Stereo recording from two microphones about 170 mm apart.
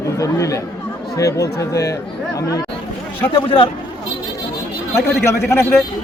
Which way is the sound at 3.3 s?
30° left (ahead or behind).